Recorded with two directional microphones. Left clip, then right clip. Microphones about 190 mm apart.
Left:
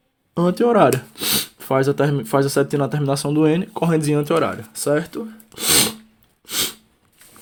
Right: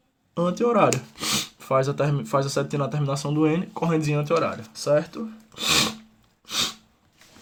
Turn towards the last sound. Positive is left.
turn(degrees=20)  # may be behind; listen again after turning